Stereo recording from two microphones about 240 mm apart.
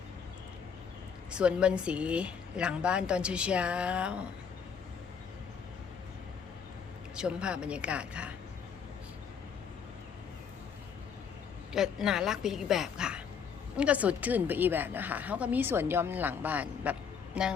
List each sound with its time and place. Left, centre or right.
1.3 s speech: centre
7.2 s speech: centre
11.7 s a woman's voice: centre